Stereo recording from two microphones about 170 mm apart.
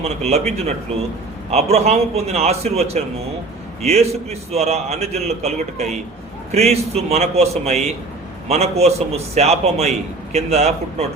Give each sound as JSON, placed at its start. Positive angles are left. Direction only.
{"t": 0.0, "sound": "a man's voice", "side_deg": -40}